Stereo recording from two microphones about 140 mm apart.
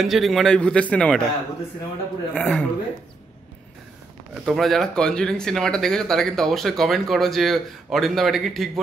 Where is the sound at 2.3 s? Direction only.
5° left (ahead or behind).